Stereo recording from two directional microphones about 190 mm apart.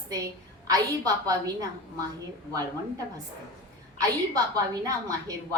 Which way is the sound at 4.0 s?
20° right (ahead or behind).